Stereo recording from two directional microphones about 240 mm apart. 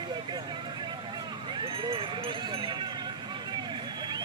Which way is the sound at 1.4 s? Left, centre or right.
Right.